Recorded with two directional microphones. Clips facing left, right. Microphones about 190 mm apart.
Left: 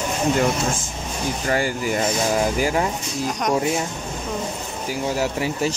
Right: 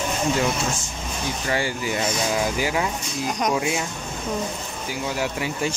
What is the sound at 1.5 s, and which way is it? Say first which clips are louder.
Speech: left 3 dB; 45° left (ahead or behind).